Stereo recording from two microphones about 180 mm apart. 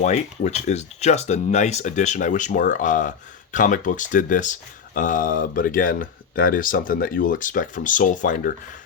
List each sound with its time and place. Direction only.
0.0 s speech: 40° left (ahead or behind)